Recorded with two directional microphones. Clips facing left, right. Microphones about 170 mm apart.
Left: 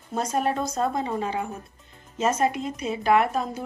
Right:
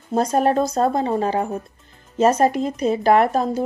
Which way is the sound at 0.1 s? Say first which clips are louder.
Right 7 dB; 35° right (ahead or behind).